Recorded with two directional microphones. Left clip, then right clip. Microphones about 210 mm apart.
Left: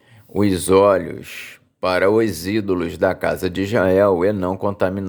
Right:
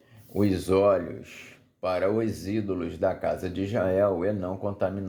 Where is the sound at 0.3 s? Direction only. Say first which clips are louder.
Left 9 dB; 35° left (ahead or behind).